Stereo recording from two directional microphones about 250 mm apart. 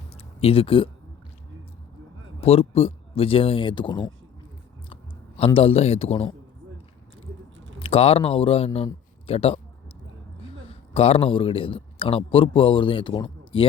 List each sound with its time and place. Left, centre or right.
0.1 s a sound: left
2.4 s speech: left
5.4 s speech: left
7.8 s speech: left
10.7 s speech: left